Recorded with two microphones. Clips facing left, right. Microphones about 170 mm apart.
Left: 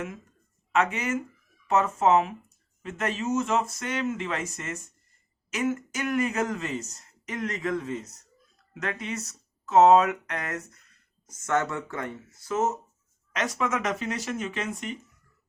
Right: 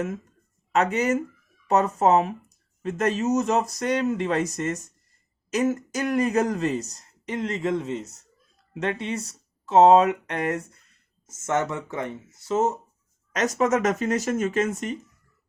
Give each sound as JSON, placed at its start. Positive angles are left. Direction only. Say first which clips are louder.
{"t": 0.7, "sound": "speech", "louder": "right 4 dB", "side_deg": -40}
{"t": 13.3, "sound": "speech", "louder": "right 6 dB", "side_deg": -40}